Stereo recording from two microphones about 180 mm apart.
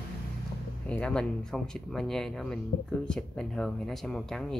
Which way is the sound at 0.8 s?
5° left (ahead or behind).